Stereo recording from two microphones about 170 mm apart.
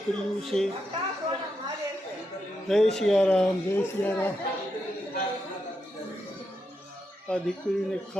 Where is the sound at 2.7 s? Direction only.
5° left (ahead or behind).